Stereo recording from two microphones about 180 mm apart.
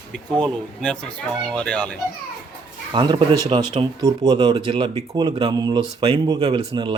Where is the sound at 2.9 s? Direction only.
25° right (ahead or behind).